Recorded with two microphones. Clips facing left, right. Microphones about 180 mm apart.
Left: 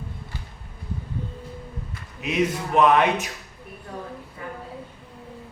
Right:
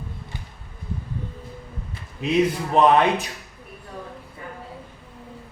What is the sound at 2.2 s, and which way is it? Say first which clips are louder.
Speech: right 3 dB; 30° right (ahead or behind).